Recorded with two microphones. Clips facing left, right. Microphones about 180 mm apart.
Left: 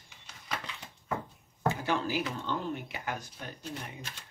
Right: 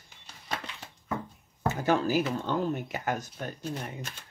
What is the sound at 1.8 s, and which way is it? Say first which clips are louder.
Speech: right 6 dB; 45° right (ahead or behind).